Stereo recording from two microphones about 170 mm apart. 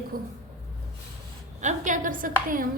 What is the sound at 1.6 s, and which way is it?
A woman's voice, 45° right (ahead or behind).